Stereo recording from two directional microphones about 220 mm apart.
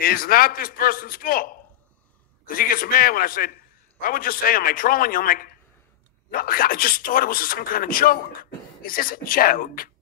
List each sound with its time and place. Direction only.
0.0 s speech: 40° left (ahead or behind)